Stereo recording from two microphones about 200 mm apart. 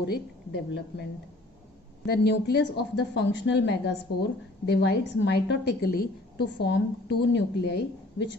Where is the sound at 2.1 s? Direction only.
55° left (ahead or behind).